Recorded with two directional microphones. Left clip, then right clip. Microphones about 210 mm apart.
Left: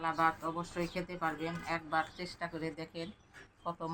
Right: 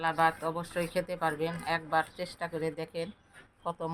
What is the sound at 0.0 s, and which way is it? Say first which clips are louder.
Speech: right 4 dB; 45° right (ahead or behind).